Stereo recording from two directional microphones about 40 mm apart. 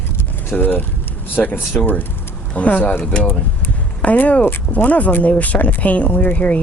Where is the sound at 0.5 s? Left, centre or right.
Left.